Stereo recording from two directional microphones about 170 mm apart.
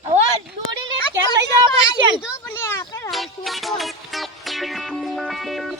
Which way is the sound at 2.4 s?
15° left (ahead or behind).